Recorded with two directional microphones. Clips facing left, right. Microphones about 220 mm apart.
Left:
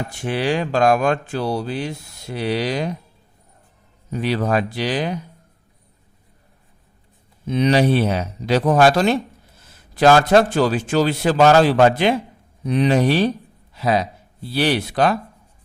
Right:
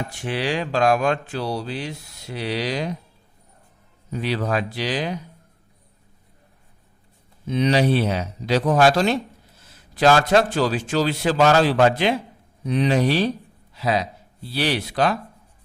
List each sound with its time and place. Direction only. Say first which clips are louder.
0.2 s speech: left 4 dB; 50° left (ahead or behind)
4.2 s speech: left 4 dB; 45° left (ahead or behind)
7.5 s a man's voice: left 2 dB; 55° left (ahead or behind)